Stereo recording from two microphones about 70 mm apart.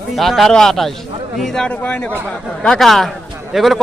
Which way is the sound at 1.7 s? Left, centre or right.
Centre.